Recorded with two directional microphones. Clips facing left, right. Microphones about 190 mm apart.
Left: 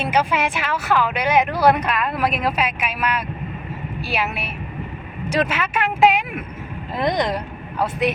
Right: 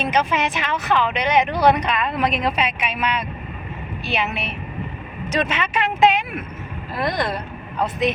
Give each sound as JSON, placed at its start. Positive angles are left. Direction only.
{"t": 0.0, "sound": "speech", "side_deg": 10}